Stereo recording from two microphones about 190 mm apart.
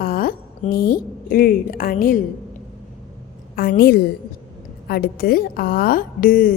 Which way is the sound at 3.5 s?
50° left (ahead or behind).